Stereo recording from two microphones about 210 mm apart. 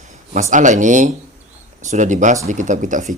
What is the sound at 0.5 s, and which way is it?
Speech, 35° right (ahead or behind).